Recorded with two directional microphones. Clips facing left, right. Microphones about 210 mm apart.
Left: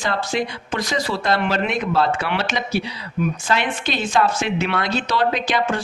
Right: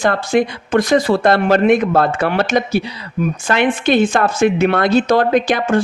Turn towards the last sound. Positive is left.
turn(degrees=-50)  # may be behind; listen again after turning